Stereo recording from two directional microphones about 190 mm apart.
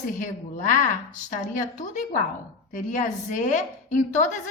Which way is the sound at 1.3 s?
40° left (ahead or behind).